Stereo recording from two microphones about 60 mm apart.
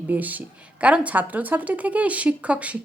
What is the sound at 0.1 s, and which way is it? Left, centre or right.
Speech, right.